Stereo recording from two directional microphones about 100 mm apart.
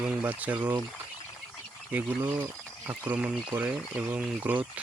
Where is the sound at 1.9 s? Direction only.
15° right (ahead or behind).